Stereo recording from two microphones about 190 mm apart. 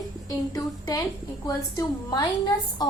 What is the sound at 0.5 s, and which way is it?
A woman's voice, 15° left (ahead or behind).